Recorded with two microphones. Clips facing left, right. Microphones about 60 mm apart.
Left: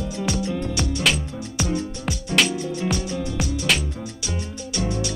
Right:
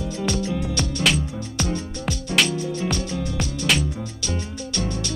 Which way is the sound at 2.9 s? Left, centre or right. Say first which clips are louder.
Left 1 dB; centre.